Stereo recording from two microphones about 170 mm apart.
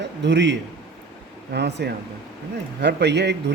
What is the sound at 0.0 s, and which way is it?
Speech, 90° right.